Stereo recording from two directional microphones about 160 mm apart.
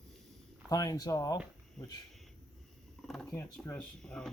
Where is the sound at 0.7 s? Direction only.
20° left (ahead or behind).